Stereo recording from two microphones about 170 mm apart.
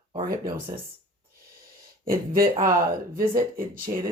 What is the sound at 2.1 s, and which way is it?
Speech, 55° right (ahead or behind).